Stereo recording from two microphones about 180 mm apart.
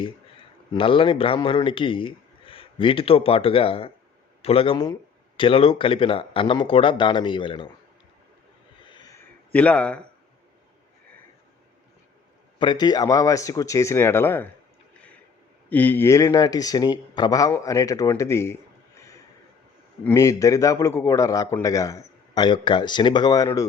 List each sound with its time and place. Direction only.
0.0 s a man's voice: 30° left (ahead or behind)
8.9 s a sound: 20° left (ahead or behind)
9.5 s a man's voice: 10° left (ahead or behind)
12.5 s a man's voice: 25° left (ahead or behind)
15.7 s a man's voice: 10° left (ahead or behind)
18.9 s a sound: 15° left (ahead or behind)
20.1 s a man's voice: 15° left (ahead or behind)